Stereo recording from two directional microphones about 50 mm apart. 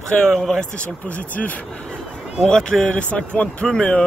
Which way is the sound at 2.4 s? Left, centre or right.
Centre.